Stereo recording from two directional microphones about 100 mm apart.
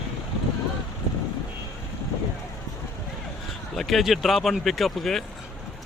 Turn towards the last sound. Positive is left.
turn(degrees=5)  # may be behind; listen again after turning